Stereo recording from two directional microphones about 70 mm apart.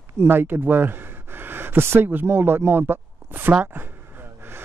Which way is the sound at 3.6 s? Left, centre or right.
Right.